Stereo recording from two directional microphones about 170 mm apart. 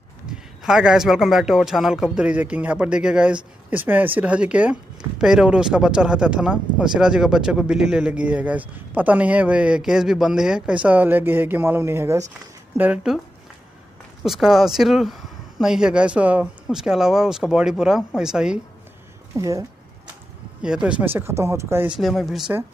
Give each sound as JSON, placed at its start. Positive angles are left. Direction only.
{"t": 0.3, "sound": "a man's voice", "side_deg": -5}
{"t": 14.2, "sound": "a man's voice", "side_deg": 0}
{"t": 19.3, "sound": "speech", "side_deg": -20}
{"t": 20.6, "sound": "speech", "side_deg": -5}